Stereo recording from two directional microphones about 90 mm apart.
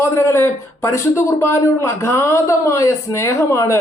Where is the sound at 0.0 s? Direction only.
30° left (ahead or behind).